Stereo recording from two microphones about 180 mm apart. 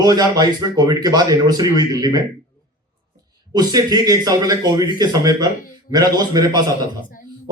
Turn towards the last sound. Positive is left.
turn(degrees=50)  # may be behind; listen again after turning